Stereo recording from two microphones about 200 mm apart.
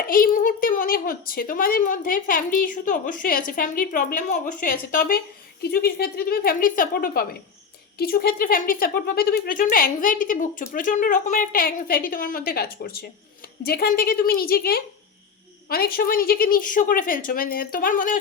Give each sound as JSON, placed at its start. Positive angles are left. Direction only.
{"t": 0.0, "sound": "a woman's voice", "side_deg": 45}